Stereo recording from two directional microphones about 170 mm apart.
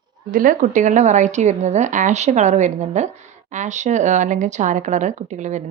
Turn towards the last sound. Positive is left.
turn(degrees=-45)  # may be behind; listen again after turning